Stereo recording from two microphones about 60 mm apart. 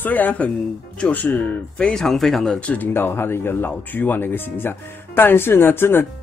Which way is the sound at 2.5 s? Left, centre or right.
Left.